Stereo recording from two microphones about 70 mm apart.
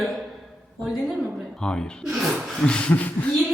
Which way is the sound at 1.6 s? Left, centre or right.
Centre.